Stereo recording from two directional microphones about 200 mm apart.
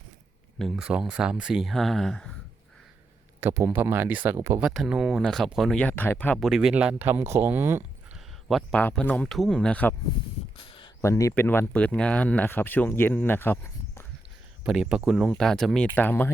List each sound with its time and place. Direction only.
0.6 s speech: 5° right (ahead or behind)
3.4 s speech: 15° right (ahead or behind)
4.7 s speech: 5° right (ahead or behind)
8.4 s speech: 5° left (ahead or behind)
10.6 s a sound: 25° left (ahead or behind)
11.0 s speech: 15° left (ahead or behind)
14.6 s speech: 5° right (ahead or behind)